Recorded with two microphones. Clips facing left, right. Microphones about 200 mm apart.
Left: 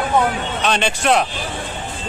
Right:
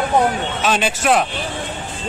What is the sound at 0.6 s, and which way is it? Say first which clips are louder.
Speech: even; 5° right (ahead or behind).